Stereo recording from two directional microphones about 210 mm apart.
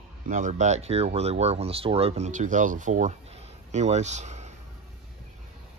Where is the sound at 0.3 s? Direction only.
35° right (ahead or behind).